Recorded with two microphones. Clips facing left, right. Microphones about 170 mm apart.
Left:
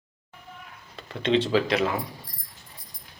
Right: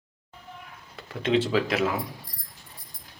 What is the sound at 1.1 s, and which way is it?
Speech, 5° right (ahead or behind).